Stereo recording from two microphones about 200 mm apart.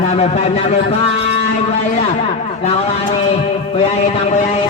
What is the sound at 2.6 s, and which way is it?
A man's voice, 35° left (ahead or behind).